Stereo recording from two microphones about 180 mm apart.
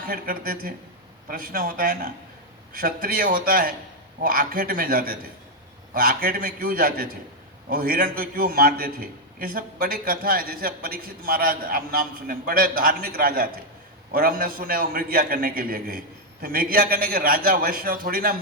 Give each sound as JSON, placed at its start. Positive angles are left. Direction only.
{"t": 0.1, "sound": "a man's voice", "side_deg": -55}